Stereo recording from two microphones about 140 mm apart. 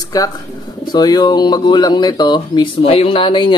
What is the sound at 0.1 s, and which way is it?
Speech, 25° left (ahead or behind).